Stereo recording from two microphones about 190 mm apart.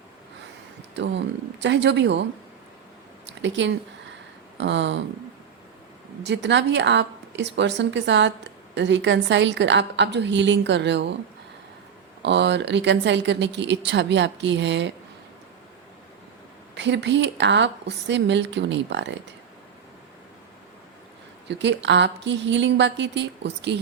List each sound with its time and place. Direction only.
0.9 s speech: 70° right (ahead or behind)
3.2 s speech: 70° right (ahead or behind)
6.2 s speech: 70° right (ahead or behind)
12.2 s speech: 65° right (ahead or behind)
16.7 s speech: 70° right (ahead or behind)
21.4 s speech: 65° right (ahead or behind)